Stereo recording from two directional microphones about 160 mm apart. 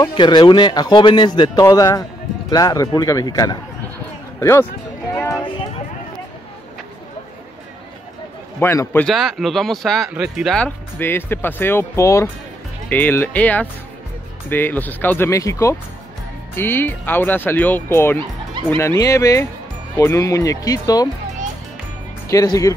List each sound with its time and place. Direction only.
0.1 s speech: 30° left (ahead or behind)
5.1 s a sound: 15° left (ahead or behind)
8.5 s speech: 15° left (ahead or behind)
9.0 s speech: centre (ahead or behind); by 18.2 s 15° left (ahead or behind)
18.2 s speech: 30° right (ahead or behind)
18.8 s speech: 20° left (ahead or behind)
22.3 s speech: 20° left (ahead or behind)